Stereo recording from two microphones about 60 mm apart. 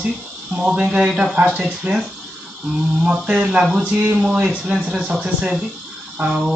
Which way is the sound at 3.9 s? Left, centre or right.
Right.